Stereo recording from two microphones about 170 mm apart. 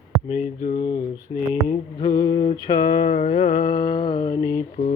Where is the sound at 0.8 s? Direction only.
25° left (ahead or behind).